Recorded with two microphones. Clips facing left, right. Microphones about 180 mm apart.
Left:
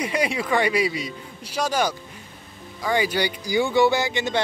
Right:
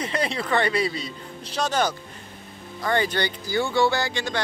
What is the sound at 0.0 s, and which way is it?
Speech, 10° left (ahead or behind).